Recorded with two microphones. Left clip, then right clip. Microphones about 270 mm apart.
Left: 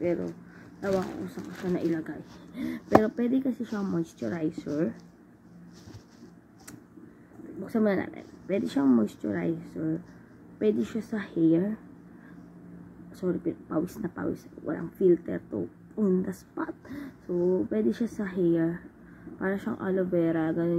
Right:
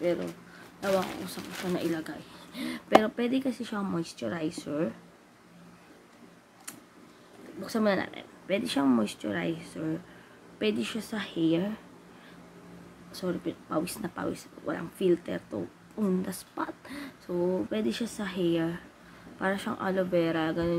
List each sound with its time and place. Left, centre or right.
0.8 s speech: centre
7.6 s speech: centre
13.1 s speech: centre